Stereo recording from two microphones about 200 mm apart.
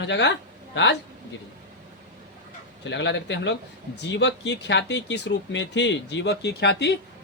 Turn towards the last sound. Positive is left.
turn(degrees=60)  # may be behind; listen again after turning